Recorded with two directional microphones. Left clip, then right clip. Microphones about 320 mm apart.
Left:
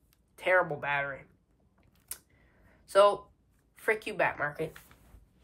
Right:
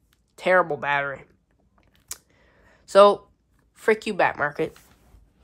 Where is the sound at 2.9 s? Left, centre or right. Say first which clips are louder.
Right 8 dB; centre.